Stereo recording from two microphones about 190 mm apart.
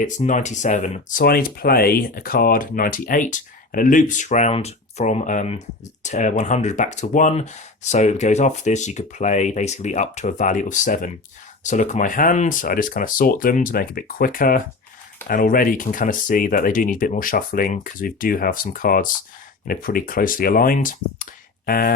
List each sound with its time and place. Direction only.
0.0 s speech: 40° left (ahead or behind)
1.2 s speech: 50° left (ahead or behind)